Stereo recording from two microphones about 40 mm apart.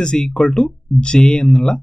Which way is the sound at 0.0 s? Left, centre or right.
Left.